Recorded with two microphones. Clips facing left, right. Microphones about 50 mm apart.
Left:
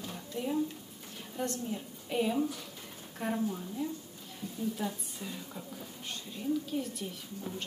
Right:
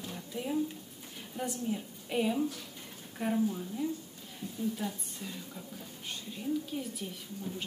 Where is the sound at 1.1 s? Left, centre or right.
Centre.